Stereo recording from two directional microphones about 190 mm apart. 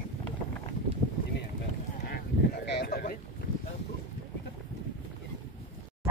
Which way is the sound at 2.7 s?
55° left (ahead or behind).